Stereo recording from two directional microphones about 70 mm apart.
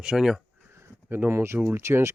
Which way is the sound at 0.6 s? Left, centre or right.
Right.